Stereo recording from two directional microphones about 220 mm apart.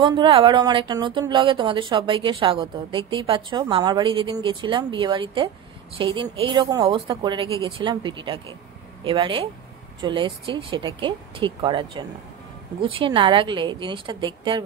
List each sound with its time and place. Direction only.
0.0 s speech: 20° right (ahead or behind)